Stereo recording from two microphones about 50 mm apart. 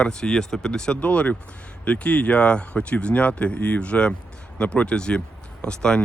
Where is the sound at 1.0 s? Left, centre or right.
Left.